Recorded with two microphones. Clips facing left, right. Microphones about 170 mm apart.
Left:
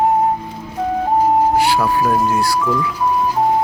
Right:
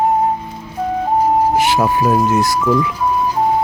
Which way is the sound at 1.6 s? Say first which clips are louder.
Right 1 dB; 20° right (ahead or behind).